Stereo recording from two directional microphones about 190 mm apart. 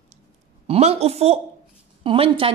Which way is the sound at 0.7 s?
35° right (ahead or behind).